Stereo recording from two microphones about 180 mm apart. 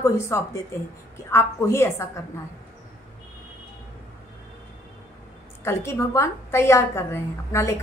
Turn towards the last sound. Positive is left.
turn(degrees=15)  # may be behind; listen again after turning